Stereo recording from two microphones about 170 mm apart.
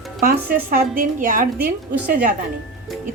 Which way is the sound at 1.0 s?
50° right (ahead or behind).